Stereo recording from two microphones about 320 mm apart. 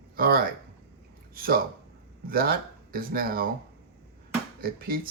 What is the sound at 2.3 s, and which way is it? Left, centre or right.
Speech, right.